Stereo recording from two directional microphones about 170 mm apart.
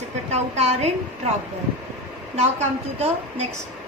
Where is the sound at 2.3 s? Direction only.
40° right (ahead or behind).